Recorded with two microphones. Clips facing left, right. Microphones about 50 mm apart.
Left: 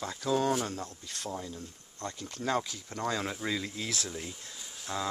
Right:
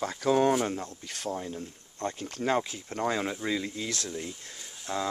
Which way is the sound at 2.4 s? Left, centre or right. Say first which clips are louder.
Right 3 dB; right.